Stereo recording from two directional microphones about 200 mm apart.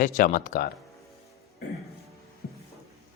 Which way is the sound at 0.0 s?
40° left (ahead or behind).